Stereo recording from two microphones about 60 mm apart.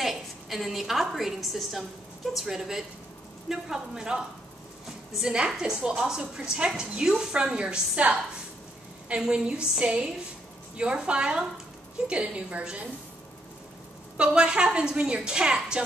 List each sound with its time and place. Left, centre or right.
0.0 s a woman's voice: centre; by 8.2 s right
9.3 s a woman's voice: centre
14.1 s a woman's voice: centre